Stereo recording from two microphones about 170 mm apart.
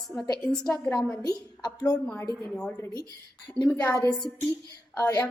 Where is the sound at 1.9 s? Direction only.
5° left (ahead or behind).